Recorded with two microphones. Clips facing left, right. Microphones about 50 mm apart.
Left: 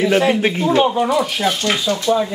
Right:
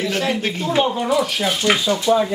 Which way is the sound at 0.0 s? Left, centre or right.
Centre.